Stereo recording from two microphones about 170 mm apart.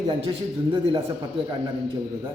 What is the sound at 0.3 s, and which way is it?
Speech, 30° right (ahead or behind).